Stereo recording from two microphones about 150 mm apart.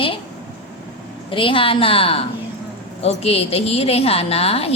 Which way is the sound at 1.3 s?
35° left (ahead or behind).